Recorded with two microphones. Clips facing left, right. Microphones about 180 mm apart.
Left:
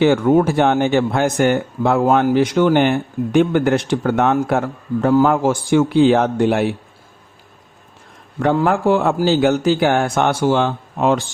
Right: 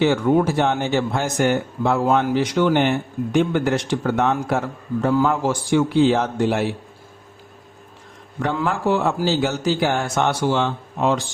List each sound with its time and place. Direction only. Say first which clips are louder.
0.0 s speech: left 4 dB; 50° left (ahead or behind)
8.4 s a man's voice: left 6 dB; 50° left (ahead or behind)